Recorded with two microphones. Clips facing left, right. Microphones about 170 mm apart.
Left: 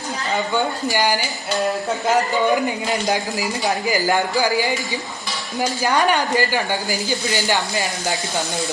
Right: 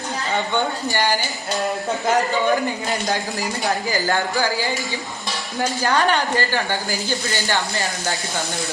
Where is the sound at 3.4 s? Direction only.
10° left (ahead or behind).